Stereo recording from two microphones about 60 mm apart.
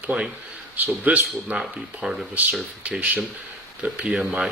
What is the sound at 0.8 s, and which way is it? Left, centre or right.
Speech, right.